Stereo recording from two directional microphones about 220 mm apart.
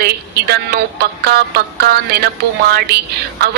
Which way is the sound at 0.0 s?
45° right (ahead or behind).